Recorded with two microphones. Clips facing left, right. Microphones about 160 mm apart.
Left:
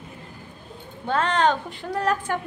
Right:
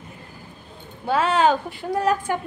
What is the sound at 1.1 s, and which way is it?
A woman's voice, 5° right (ahead or behind).